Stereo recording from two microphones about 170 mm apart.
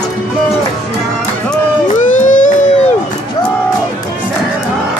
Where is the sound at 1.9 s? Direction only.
50° left (ahead or behind).